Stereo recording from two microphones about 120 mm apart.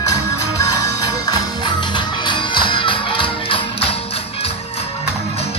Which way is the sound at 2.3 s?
40° left (ahead or behind).